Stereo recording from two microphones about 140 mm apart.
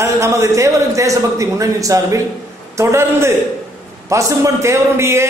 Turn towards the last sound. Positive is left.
turn(degrees=-20)  # may be behind; listen again after turning